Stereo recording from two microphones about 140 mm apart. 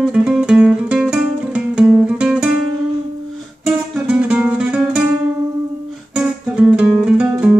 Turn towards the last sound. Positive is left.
turn(degrees=-10)  # may be behind; listen again after turning